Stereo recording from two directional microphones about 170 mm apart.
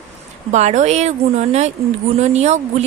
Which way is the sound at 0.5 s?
45° right (ahead or behind).